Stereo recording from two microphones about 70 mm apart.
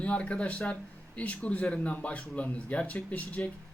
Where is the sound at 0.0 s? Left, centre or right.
Centre.